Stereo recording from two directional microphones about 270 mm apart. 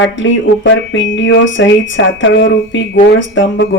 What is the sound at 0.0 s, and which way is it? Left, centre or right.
Speech, left.